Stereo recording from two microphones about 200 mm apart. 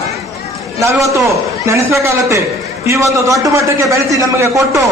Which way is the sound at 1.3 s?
15° right (ahead or behind).